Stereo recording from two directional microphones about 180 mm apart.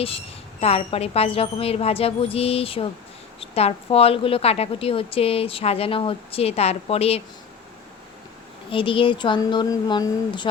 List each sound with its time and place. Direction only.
0.6 s a woman's voice: 35° left (ahead or behind)
8.7 s speech: 30° left (ahead or behind)